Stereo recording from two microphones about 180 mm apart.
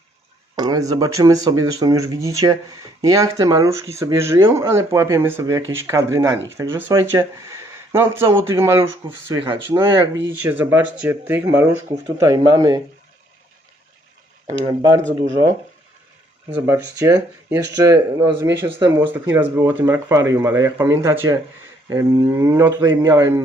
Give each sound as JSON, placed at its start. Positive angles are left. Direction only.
{"t": 0.5, "sound": "speech", "side_deg": -20}
{"t": 14.4, "sound": "speech", "side_deg": -20}
{"t": 16.6, "sound": "speech", "side_deg": -15}